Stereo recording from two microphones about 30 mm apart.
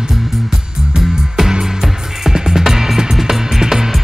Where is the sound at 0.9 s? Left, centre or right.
Centre.